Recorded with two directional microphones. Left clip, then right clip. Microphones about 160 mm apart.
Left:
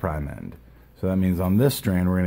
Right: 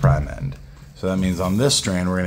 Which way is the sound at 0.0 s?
40° left (ahead or behind).